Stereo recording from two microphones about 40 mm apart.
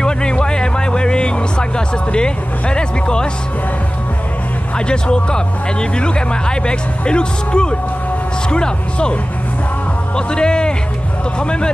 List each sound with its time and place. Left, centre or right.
0.0 s music: left
2.1 s speech: left
4.7 s speech: left
10.1 s speech: left